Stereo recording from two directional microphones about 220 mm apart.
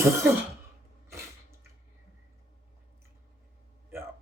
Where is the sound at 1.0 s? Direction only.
15° right (ahead or behind).